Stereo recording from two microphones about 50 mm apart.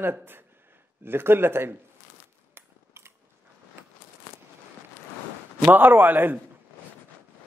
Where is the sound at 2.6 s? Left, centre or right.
Right.